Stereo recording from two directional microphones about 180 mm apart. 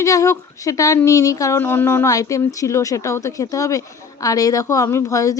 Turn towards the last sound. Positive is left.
turn(degrees=20)  # may be behind; listen again after turning